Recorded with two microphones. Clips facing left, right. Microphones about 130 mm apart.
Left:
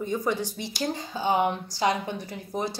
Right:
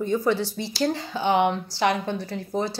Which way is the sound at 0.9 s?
75° right (ahead or behind).